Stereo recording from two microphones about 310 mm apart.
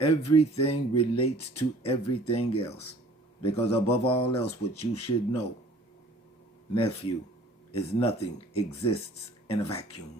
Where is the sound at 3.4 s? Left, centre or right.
Centre.